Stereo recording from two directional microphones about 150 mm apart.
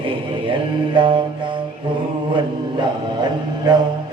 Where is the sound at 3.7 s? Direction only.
30° right (ahead or behind).